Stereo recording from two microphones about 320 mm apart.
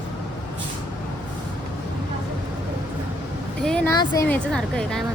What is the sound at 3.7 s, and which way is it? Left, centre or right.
A woman's voice, centre.